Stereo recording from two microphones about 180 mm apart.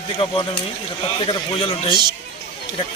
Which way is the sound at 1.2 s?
30° left (ahead or behind).